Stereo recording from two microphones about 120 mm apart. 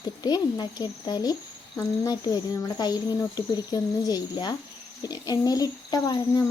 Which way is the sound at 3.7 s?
35° left (ahead or behind).